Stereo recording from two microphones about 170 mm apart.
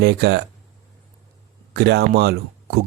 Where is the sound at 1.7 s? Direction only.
75° right (ahead or behind).